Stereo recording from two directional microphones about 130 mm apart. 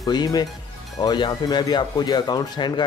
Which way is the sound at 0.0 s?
30° left (ahead or behind).